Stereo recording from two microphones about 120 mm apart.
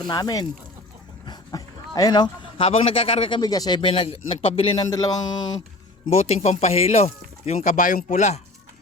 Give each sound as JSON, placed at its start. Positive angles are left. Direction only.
{"t": 0.1, "sound": "speech", "side_deg": 35}
{"t": 1.2, "sound": "dog", "side_deg": 35}
{"t": 2.6, "sound": "a man's voice", "side_deg": 55}
{"t": 4.9, "sound": "speech", "side_deg": 30}
{"t": 6.1, "sound": "speech", "side_deg": 65}